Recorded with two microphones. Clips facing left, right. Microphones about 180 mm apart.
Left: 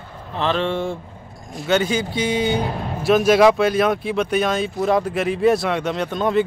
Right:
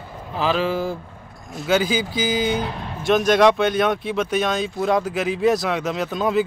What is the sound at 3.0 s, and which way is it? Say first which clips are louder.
Speech: left 2 dB; 5° left (ahead or behind).